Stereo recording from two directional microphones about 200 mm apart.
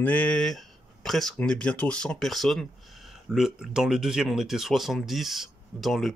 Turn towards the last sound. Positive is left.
turn(degrees=0)  # may be behind; listen again after turning